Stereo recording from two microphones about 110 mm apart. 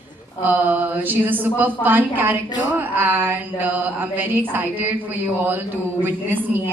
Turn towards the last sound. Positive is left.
turn(degrees=-20)  # may be behind; listen again after turning